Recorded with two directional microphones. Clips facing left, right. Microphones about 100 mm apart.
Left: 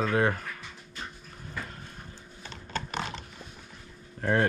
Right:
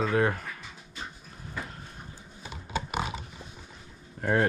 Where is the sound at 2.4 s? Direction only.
10° right (ahead or behind).